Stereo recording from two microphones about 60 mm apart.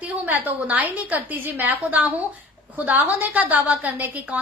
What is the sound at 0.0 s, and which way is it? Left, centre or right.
A woman's voice, right.